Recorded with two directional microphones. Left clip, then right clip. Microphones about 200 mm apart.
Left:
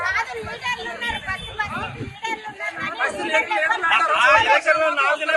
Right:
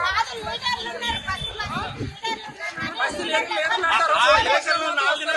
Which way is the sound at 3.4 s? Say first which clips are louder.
Left 2 dB; 5° right (ahead or behind).